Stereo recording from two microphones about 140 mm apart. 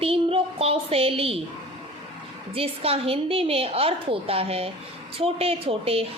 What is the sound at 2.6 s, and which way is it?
A woman's voice, 45° right (ahead or behind).